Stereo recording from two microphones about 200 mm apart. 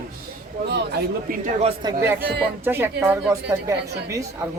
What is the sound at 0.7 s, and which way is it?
Speech, 55° right (ahead or behind).